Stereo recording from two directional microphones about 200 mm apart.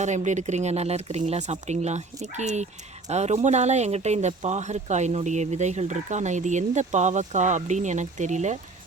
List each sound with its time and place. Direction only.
0.0 s speech: 35° right (ahead or behind)